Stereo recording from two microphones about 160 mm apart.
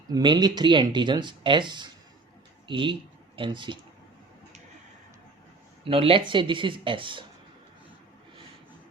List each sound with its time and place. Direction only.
0.1 s speech: 25° right (ahead or behind)
5.8 s speech: 35° right (ahead or behind)